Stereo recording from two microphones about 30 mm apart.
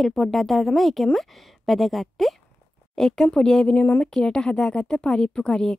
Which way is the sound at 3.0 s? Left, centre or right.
Centre.